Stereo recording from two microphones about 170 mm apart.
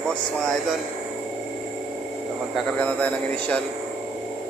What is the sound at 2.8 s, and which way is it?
Speech, 10° left (ahead or behind).